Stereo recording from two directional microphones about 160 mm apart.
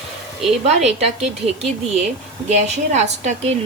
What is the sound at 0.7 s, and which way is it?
Speech, 45° right (ahead or behind).